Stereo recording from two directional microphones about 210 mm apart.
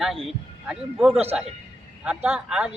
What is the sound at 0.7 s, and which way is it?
Speech, 5° right (ahead or behind).